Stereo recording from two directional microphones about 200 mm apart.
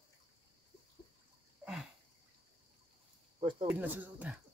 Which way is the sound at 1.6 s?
Centre (ahead or behind).